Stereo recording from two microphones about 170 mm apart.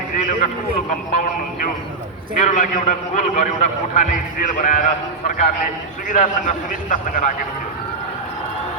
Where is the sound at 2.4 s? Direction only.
45° left (ahead or behind).